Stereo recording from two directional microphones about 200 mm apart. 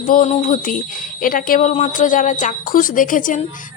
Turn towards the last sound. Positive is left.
turn(degrees=40)  # may be behind; listen again after turning